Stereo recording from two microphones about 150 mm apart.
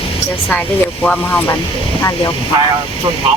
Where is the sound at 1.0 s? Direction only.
10° left (ahead or behind).